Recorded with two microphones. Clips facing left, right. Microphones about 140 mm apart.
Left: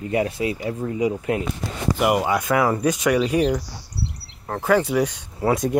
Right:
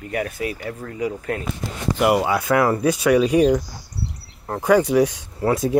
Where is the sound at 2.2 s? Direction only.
5° right (ahead or behind).